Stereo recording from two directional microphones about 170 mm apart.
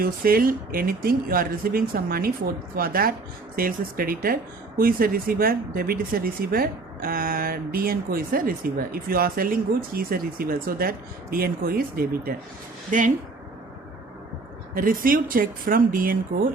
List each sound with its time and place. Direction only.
0.0 s speech: 60° right (ahead or behind)
14.8 s speech: 55° right (ahead or behind)